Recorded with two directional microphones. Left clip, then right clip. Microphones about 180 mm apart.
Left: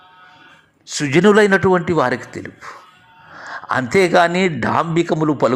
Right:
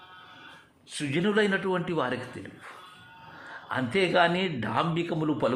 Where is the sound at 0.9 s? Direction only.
45° left (ahead or behind).